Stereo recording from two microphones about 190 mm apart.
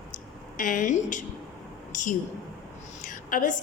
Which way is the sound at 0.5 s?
45° left (ahead or behind).